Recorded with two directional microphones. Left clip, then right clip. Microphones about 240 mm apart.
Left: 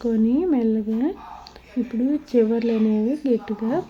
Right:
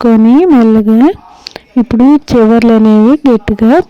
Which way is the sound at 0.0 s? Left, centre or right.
Right.